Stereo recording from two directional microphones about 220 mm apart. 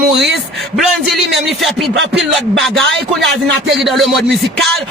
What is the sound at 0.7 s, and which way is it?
A man's voice, centre (ahead or behind).